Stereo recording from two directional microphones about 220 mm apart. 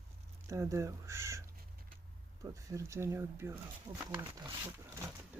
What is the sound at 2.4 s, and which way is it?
Speech, 15° right (ahead or behind).